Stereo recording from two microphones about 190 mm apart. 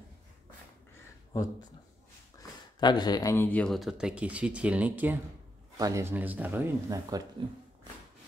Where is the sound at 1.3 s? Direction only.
20° left (ahead or behind); by 7.2 s 20° right (ahead or behind).